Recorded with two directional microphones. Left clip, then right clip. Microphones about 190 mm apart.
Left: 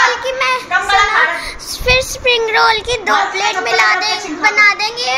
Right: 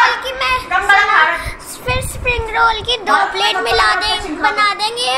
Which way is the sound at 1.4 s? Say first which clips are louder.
Left 5 dB; 60° left (ahead or behind).